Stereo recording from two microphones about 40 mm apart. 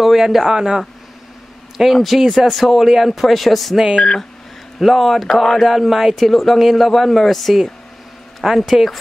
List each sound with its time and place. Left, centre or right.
0.0 s speech: centre
1.8 s speech: centre
3.9 s speech: centre
4.7 s speech: centre